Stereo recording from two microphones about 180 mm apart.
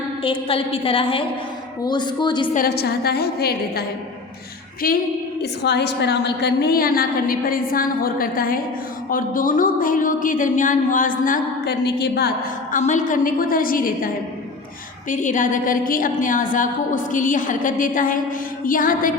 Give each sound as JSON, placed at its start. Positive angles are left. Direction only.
{"t": 0.2, "sound": "a woman's voice", "side_deg": 30}
{"t": 2.5, "sound": "a woman's voice", "side_deg": 55}
{"t": 4.8, "sound": "speech", "side_deg": 50}
{"t": 5.4, "sound": "a woman's voice", "side_deg": 70}
{"t": 12.7, "sound": "speech", "side_deg": 45}
{"t": 15.1, "sound": "speech", "side_deg": 45}